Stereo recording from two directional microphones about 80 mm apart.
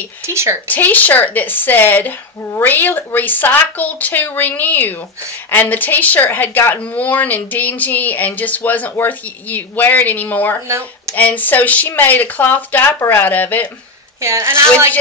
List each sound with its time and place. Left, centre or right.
0.2 s a woman's voice: right
0.7 s speech: left
10.7 s speech: right
11.1 s speech: left
14.2 s a woman's voice: right